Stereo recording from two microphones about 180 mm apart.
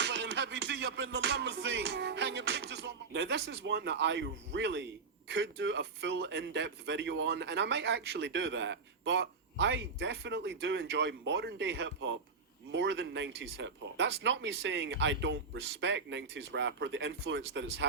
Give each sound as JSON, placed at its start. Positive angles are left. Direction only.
{"t": 0.0, "sound": "music", "side_deg": -75}
{"t": 5.3, "sound": "a man's voice", "side_deg": -80}